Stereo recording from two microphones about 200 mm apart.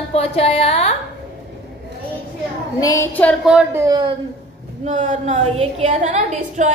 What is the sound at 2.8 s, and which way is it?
Speech, 15° left (ahead or behind).